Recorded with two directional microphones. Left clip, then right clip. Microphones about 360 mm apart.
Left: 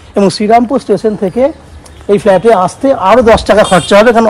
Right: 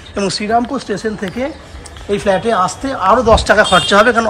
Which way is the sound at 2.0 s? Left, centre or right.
Centre.